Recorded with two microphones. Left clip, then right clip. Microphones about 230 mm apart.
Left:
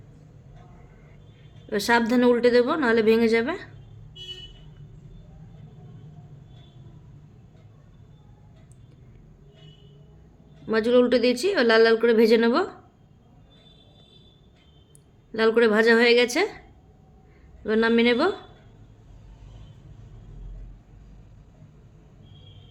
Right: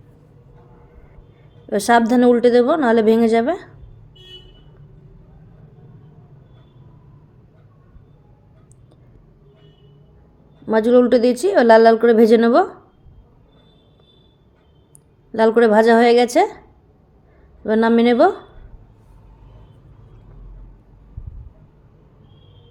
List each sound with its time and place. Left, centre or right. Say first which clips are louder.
1.7 s a woman's voice: right 7 dB; centre
10.7 s a woman's voice: right 6 dB; centre
15.3 s a woman's voice: right 6 dB; centre
17.6 s a woman's voice: right 5 dB; centre